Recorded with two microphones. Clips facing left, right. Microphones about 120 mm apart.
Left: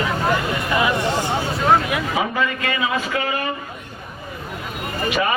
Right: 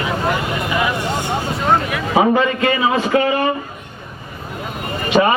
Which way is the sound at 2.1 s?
30° right (ahead or behind).